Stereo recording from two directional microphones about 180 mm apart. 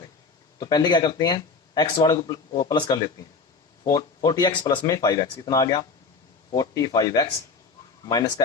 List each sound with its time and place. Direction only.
0.6 s speech: 25° left (ahead or behind)